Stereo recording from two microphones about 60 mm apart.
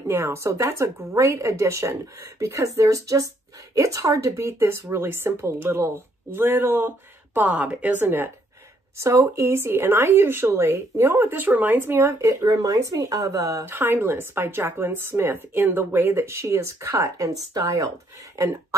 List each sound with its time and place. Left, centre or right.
0.1 s a woman's voice: right
8.9 s speech: right
12.2 s speech: right
13.7 s speech: right